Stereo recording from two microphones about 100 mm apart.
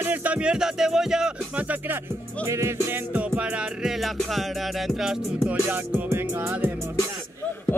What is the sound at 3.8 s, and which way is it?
Music, centre (ahead or behind).